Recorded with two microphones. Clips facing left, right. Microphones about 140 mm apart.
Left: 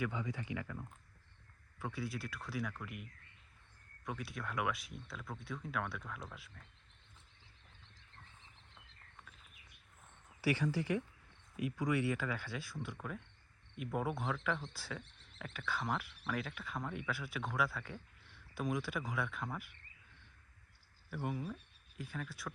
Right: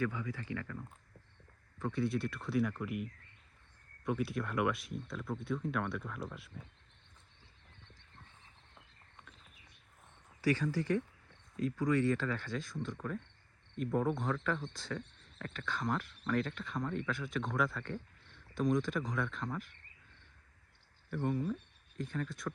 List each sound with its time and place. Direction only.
0.0 s speech: 20° left (ahead or behind); by 6.7 s centre (ahead or behind)
10.4 s speech: 10° left (ahead or behind)
21.1 s speech: 5° left (ahead or behind)